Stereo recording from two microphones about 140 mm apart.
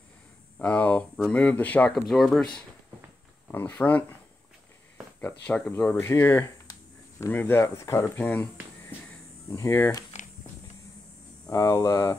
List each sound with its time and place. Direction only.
0.6 s speech: 10° left (ahead or behind)
5.2 s speech: 10° left (ahead or behind)
9.5 s speech: 20° left (ahead or behind)
11.4 s speech: 25° left (ahead or behind)